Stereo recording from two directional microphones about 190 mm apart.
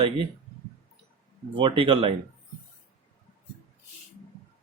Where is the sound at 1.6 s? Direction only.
30° right (ahead or behind).